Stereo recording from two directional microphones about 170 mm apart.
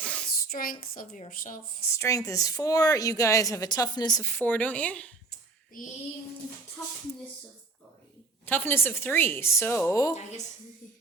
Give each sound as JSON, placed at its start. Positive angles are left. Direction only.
{"t": 0.0, "sound": "child singing", "side_deg": 5}
{"t": 0.4, "sound": "speech", "side_deg": 55}
{"t": 1.9, "sound": "a woman's voice", "side_deg": 20}
{"t": 8.4, "sound": "a woman's voice", "side_deg": 10}